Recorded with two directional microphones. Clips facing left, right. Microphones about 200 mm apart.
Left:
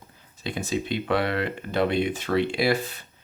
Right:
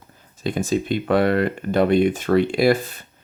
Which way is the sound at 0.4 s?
50° right (ahead or behind).